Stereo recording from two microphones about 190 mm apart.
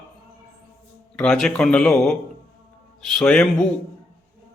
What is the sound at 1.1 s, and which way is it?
A man's voice, 5° left (ahead or behind).